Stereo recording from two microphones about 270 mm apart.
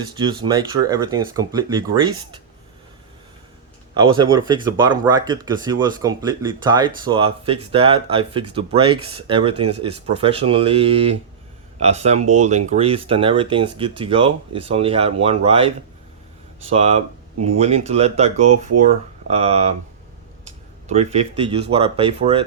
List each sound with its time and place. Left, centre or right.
0.1 s speech: centre
4.4 s speech: centre
17.3 s speech: right
17.6 s speech: right
20.8 s speech: right